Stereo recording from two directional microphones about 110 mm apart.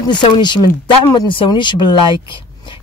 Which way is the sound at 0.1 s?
45° left (ahead or behind).